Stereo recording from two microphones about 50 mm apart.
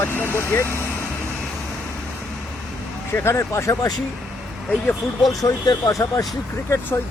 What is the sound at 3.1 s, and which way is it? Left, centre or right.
Speech, left.